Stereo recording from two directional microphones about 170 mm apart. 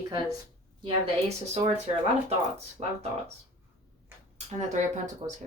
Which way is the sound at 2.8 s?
35° right (ahead or behind).